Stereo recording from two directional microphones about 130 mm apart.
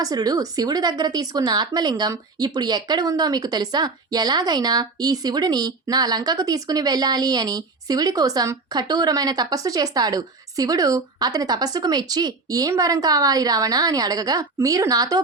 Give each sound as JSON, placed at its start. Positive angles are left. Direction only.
{"t": 0.0, "sound": "a woman's voice", "side_deg": -30}